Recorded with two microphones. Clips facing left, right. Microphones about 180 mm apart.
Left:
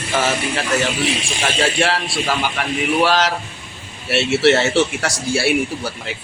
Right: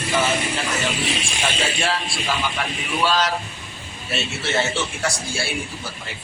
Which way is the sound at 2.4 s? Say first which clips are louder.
Left 5 dB; 65° left (ahead or behind).